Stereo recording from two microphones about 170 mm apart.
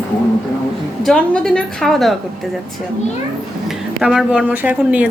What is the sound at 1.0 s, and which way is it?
A woman's voice, 5° left (ahead or behind).